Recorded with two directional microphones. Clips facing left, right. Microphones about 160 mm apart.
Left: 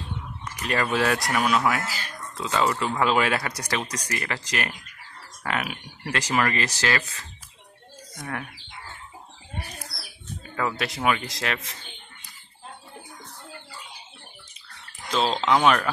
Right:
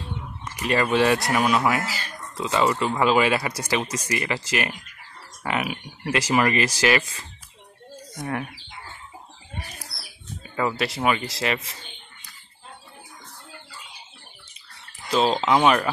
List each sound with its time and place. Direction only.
0.6 s speech: 5° right (ahead or behind)
10.5 s speech: 5° right (ahead or behind)
15.0 s speech: 10° right (ahead or behind)